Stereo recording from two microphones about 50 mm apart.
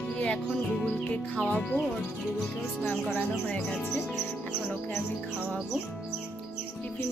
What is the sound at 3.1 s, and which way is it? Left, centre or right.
Speech, left.